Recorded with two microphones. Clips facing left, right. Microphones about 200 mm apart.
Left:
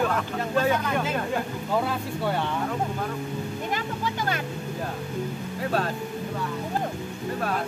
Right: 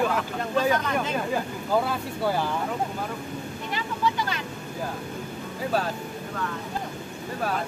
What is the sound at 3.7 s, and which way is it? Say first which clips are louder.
Vehicle: right 5 dB; 50° left (ahead or behind).